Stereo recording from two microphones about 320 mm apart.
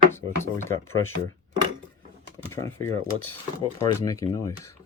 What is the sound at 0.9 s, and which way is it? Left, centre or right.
Speech, left.